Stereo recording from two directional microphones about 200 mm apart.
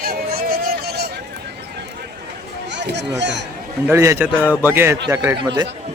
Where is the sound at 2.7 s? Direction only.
60° right (ahead or behind).